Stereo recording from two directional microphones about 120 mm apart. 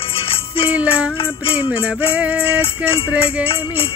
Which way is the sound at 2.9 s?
50° left (ahead or behind).